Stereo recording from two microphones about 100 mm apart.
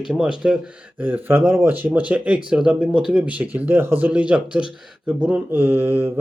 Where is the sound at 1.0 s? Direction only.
20° right (ahead or behind).